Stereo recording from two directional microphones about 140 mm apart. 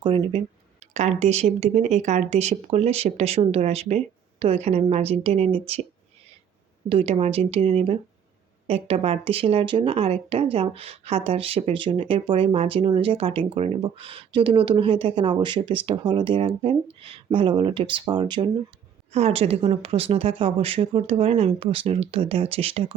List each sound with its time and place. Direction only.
0.3 s speech: 40° right (ahead or behind)
0.9 s speech: 50° right (ahead or behind)
6.8 s speech: 45° right (ahead or behind)
19.1 s speech: 45° right (ahead or behind)